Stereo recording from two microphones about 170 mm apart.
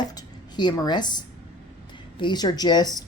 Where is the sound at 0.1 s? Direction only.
25° left (ahead or behind).